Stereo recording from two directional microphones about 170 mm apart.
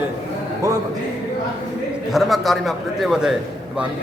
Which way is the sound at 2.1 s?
Centre (ahead or behind).